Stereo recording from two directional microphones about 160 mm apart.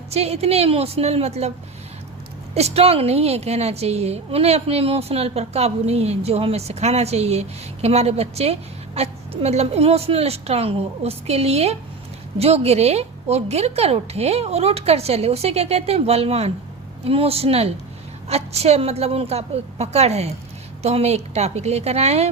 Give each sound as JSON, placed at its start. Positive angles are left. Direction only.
{"t": 0.1, "sound": "a woman's voice", "side_deg": -40}
{"t": 2.6, "sound": "a woman's voice", "side_deg": -40}